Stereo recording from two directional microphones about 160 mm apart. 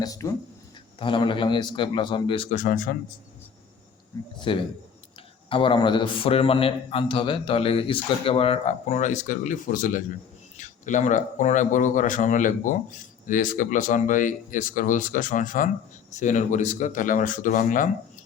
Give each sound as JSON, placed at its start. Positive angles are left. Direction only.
{"t": 0.0, "sound": "speech", "side_deg": 20}
{"t": 0.9, "sound": "a man's voice", "side_deg": 30}
{"t": 2.5, "sound": "speech", "side_deg": 55}
{"t": 4.1, "sound": "speech", "side_deg": 20}
{"t": 5.5, "sound": "a man's voice", "side_deg": 35}